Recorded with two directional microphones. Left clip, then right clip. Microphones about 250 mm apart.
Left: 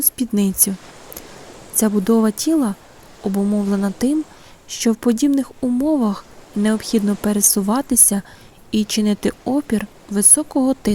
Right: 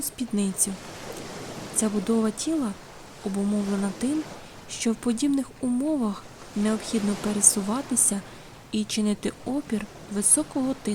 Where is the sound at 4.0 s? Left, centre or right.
Centre.